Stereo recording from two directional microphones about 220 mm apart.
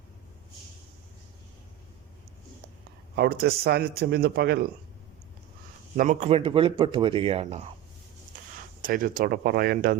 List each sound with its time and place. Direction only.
3.2 s speech: 45° right (ahead or behind)
6.0 s speech: 30° right (ahead or behind)
8.8 s speech: 40° right (ahead or behind)